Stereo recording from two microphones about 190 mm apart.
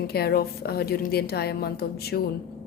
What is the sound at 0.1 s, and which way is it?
A woman's voice, 55° left (ahead or behind).